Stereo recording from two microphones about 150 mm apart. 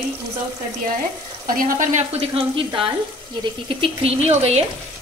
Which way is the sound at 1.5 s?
60° right (ahead or behind).